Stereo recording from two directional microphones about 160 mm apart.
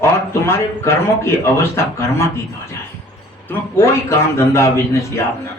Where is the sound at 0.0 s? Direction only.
15° left (ahead or behind).